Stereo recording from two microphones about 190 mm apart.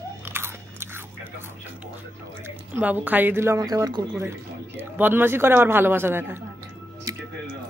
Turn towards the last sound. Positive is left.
turn(degrees=-20)  # may be behind; listen again after turning